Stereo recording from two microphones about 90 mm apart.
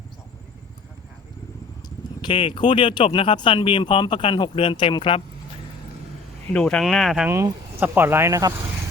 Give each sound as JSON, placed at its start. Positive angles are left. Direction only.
{"t": 2.2, "sound": "speech", "side_deg": 70}
{"t": 6.5, "sound": "speech", "side_deg": 10}
{"t": 7.3, "sound": "speech", "side_deg": -25}